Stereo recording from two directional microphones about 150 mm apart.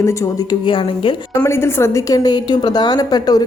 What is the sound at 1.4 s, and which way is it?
A woman's voice, 15° left (ahead or behind).